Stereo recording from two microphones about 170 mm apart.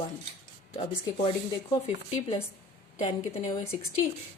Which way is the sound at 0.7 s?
30° left (ahead or behind).